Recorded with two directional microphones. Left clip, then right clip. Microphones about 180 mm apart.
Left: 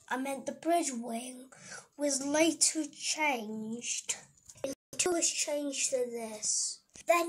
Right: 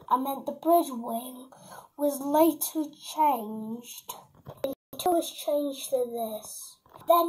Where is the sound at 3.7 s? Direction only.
5° left (ahead or behind).